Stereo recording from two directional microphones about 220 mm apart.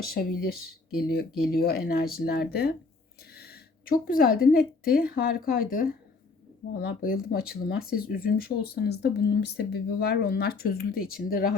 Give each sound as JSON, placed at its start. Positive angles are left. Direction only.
{"t": 0.0, "sound": "speech", "side_deg": 45}
{"t": 1.5, "sound": "speech", "side_deg": 45}